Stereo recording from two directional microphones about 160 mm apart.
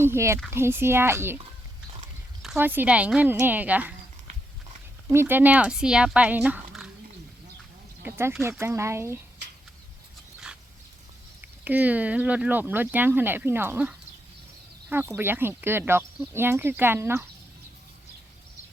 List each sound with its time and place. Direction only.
0.0 s speech: 15° right (ahead or behind)
2.6 s speech: 10° right (ahead or behind)
5.1 s speech: 15° right (ahead or behind)
8.0 s speech: 15° right (ahead or behind)
11.6 s speech: 10° right (ahead or behind)